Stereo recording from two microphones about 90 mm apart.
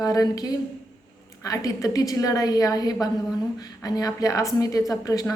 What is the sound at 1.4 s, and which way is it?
A woman's voice, 40° left (ahead or behind).